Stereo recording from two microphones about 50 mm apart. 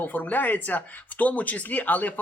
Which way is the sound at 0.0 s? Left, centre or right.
Left.